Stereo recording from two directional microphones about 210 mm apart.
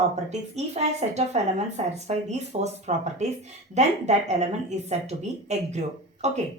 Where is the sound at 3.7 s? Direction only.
30° right (ahead or behind).